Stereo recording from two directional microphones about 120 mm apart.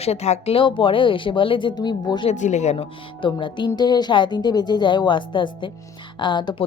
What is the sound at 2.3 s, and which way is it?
Speech, 75° left (ahead or behind).